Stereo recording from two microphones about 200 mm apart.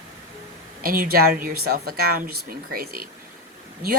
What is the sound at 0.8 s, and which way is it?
Speech, 45° right (ahead or behind).